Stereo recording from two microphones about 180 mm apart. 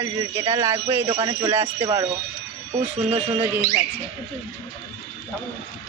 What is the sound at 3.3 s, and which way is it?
Speech, 15° right (ahead or behind).